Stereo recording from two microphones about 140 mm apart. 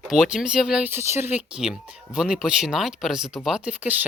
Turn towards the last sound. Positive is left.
turn(degrees=-10)  # may be behind; listen again after turning